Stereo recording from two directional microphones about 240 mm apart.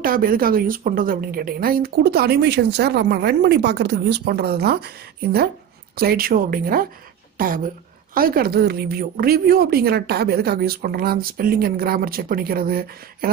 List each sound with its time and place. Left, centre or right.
0.0 s a woman's voice: right